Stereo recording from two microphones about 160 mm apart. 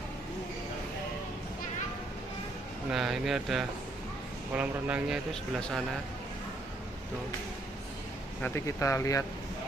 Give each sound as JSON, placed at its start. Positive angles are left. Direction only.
{"t": 2.9, "sound": "speech", "side_deg": -5}
{"t": 5.3, "sound": "speech", "side_deg": 0}
{"t": 8.4, "sound": "speech", "side_deg": 15}